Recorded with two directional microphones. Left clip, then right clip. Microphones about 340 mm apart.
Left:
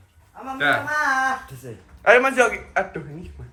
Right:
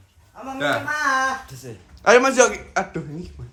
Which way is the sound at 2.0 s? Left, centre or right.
Centre.